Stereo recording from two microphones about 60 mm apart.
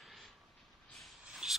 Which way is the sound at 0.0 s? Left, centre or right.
Centre.